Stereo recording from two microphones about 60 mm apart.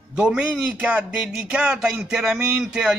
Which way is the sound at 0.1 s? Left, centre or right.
Centre.